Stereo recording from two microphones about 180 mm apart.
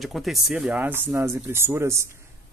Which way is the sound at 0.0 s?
Centre (ahead or behind).